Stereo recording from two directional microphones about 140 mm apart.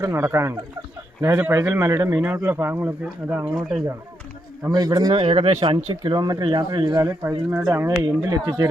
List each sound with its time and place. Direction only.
0.0 s speech: 20° right (ahead or behind)
4.7 s speech: 25° right (ahead or behind); by 5.6 s 45° right (ahead or behind)
5.6 s speech: 30° right (ahead or behind)
7.0 s speech: 15° right (ahead or behind)
8.0 s speech: 25° right (ahead or behind)